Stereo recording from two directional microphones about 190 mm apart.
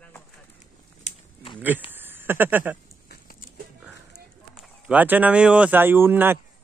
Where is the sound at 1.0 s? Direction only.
30° left (ahead or behind).